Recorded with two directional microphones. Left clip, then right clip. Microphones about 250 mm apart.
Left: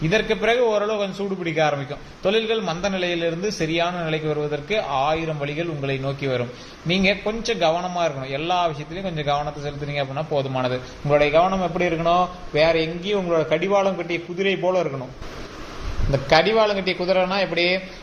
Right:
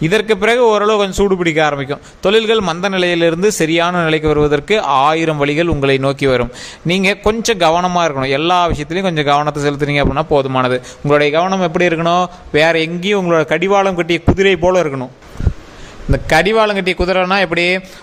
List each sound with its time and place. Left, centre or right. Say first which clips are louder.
0.0 s a man's voice: right 7 dB; right
16.1 s a man's voice: right 5 dB; right